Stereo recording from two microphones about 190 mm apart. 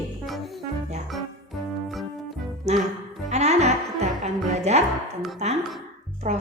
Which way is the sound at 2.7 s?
35° right (ahead or behind).